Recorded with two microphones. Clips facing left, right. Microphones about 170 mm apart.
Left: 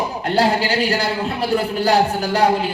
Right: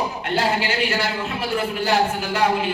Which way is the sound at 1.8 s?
35° left (ahead or behind).